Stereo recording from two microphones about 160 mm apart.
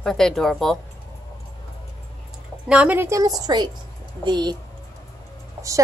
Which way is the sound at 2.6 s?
10° right (ahead or behind).